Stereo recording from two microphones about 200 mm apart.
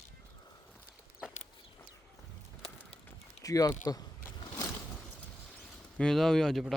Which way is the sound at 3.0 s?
15° left (ahead or behind).